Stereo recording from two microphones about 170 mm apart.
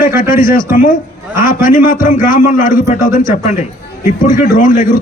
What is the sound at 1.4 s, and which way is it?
A man's voice, 55° left (ahead or behind).